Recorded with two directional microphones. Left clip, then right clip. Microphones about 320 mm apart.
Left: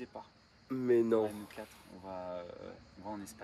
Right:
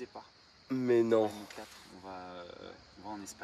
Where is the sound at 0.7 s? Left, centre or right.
Right.